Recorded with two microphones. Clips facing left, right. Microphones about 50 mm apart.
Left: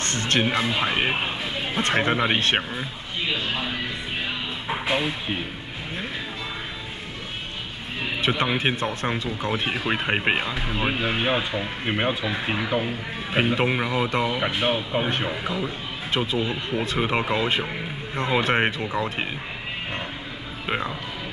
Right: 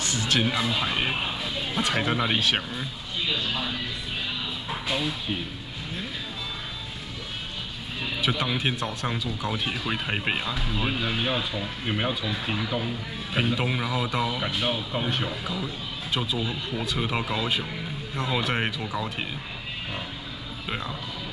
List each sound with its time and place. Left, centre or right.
0.0 s speech: left
0.4 s speech: left
8.0 s speech: left
16.2 s speech: left
20.6 s speech: left